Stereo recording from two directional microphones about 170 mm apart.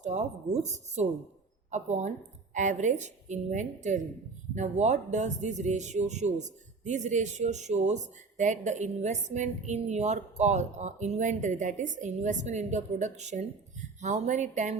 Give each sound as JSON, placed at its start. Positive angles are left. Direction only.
{"t": 0.0, "sound": "speech", "side_deg": -45}